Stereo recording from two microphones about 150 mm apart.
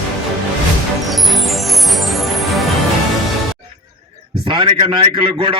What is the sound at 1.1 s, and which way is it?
Music, centre (ahead or behind).